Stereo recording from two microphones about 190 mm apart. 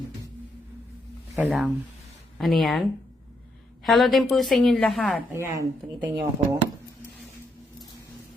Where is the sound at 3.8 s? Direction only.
Centre (ahead or behind).